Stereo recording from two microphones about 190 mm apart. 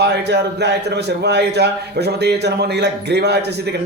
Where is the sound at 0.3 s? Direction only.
60° right (ahead or behind).